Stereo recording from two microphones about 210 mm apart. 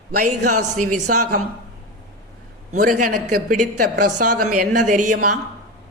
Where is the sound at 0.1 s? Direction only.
35° right (ahead or behind).